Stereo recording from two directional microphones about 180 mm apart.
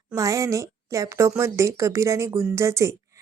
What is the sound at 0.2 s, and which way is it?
Speech, 20° right (ahead or behind).